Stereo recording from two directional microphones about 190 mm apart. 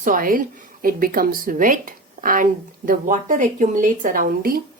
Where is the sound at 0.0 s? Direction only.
45° right (ahead or behind).